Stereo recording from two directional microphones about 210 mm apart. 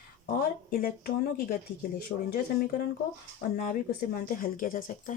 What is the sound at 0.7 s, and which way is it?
Speech, 45° left (ahead or behind).